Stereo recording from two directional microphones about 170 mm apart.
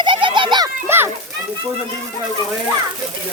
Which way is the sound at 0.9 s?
15° right (ahead or behind).